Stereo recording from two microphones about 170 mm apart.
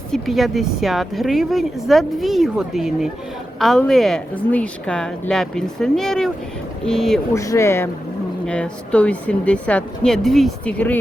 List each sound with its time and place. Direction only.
0.1 s speech: centre (ahead or behind)
7.3 s speech: 15° left (ahead or behind)